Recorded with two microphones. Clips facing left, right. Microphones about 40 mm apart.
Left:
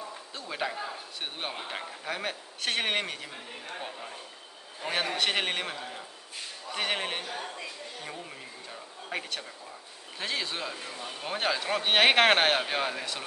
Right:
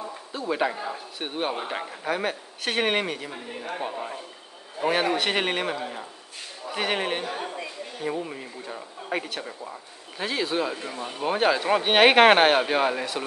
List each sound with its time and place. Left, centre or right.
0.3 s speech: centre
4.9 s speech: centre
5.8 s speech: centre
6.7 s speech: centre
7.2 s speech: centre
10.1 s speech: centre
10.7 s speech: centre